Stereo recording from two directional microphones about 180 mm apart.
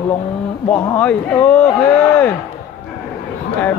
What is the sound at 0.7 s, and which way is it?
Speech, 10° left (ahead or behind).